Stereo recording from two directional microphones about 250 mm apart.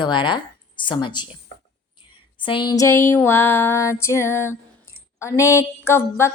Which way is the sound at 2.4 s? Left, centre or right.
Centre.